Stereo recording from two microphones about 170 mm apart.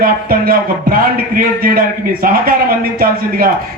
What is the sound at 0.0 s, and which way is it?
A man's voice, 60° right (ahead or behind).